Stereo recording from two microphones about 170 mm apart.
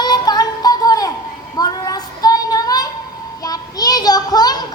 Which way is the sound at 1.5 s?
20° left (ahead or behind).